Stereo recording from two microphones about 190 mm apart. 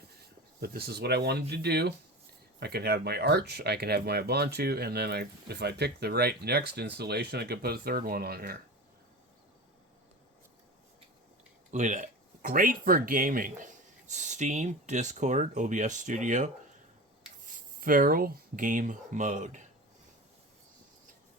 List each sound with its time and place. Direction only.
0.6 s speech: 55° right (ahead or behind)
11.7 s speech: 40° right (ahead or behind)